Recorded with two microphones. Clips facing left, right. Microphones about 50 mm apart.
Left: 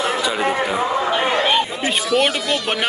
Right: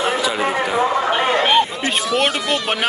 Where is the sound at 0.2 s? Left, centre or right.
Centre.